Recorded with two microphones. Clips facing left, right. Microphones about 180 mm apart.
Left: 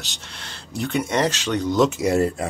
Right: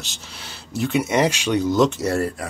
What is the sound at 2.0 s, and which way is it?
Speech, 20° left (ahead or behind).